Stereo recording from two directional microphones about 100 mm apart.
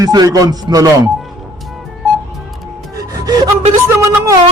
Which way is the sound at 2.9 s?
40° right (ahead or behind).